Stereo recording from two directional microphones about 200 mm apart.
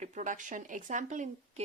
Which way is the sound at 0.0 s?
40° right (ahead or behind).